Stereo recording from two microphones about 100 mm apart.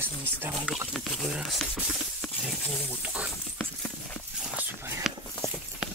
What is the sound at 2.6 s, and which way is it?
Speech, 20° left (ahead or behind).